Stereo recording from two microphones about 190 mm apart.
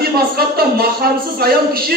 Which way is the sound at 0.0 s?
55° right (ahead or behind).